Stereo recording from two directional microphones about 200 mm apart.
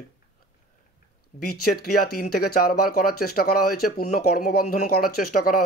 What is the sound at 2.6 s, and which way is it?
Speech, 50° left (ahead or behind).